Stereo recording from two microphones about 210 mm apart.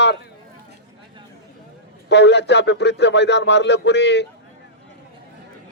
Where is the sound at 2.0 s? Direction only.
55° left (ahead or behind).